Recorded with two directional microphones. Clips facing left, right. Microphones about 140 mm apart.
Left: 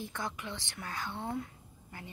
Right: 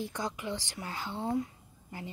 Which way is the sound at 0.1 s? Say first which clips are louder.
Right 4 dB; 15° right (ahead or behind).